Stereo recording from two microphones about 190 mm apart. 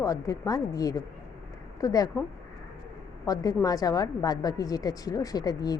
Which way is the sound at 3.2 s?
20° left (ahead or behind).